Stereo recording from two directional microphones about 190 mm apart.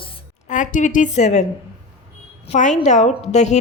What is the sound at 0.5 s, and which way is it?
Speech, 40° left (ahead or behind).